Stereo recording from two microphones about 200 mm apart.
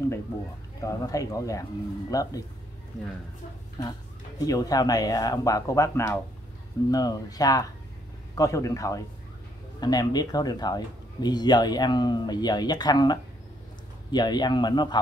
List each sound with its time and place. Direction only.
0.7 s speech: 15° left (ahead or behind)
4.5 s speech: 20° left (ahead or behind)